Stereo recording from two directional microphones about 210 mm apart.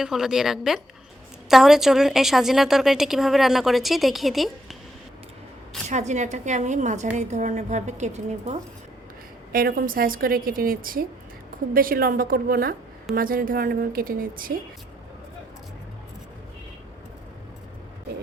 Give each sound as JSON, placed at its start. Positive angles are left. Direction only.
{"t": 0.0, "sound": "a woman's voice", "side_deg": 0}
{"t": 5.9, "sound": "a woman's voice", "side_deg": -35}
{"t": 9.5, "sound": "a woman's voice", "side_deg": -45}